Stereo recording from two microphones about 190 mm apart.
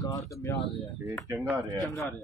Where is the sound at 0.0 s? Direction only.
15° left (ahead or behind).